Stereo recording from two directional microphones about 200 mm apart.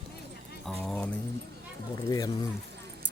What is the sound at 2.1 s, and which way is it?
Speech, 20° left (ahead or behind).